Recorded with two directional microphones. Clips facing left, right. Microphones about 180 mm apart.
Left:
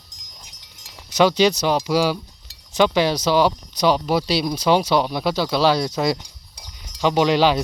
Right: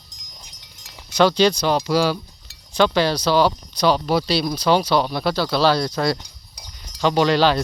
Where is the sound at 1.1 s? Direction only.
10° left (ahead or behind).